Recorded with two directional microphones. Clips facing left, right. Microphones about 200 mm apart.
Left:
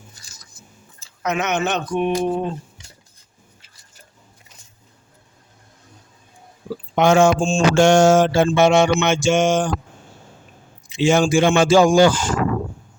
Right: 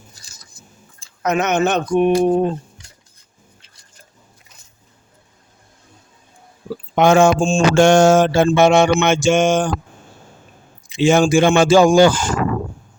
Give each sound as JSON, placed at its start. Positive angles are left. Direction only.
{"t": 1.2, "sound": "mantra", "side_deg": -45}
{"t": 6.9, "sound": "mantra", "side_deg": -50}
{"t": 10.9, "sound": "mantra", "side_deg": -55}